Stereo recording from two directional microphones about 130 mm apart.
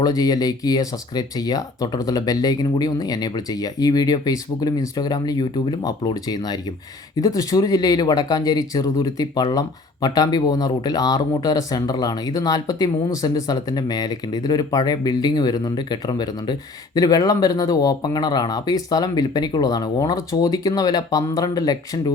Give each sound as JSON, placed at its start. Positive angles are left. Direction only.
{"t": 0.0, "sound": "speech", "side_deg": 30}